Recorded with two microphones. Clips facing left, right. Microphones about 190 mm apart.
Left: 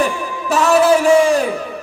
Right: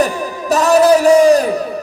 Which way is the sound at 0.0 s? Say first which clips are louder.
Right 2 dB; 40° right (ahead or behind).